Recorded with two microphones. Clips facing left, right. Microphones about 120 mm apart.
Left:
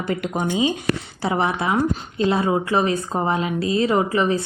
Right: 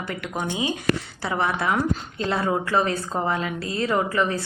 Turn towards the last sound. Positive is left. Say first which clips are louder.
# left 4 dB
turn(degrees=20)  # may be behind; listen again after turning